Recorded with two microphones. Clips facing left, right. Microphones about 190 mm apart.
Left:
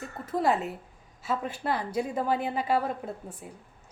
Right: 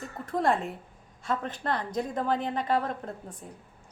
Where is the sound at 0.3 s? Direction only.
5° left (ahead or behind).